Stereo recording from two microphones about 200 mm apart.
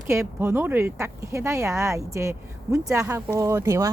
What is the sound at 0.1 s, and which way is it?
Speech, 15° right (ahead or behind).